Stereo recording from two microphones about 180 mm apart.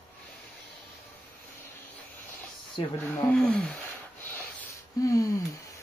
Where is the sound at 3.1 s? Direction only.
10° left (ahead or behind).